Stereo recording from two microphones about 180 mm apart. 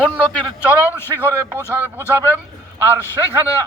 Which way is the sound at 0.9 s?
10° left (ahead or behind).